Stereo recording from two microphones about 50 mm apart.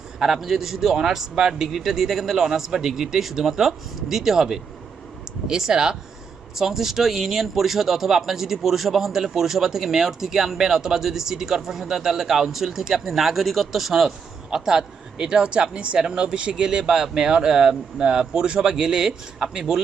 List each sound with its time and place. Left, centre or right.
0.2 s speech: centre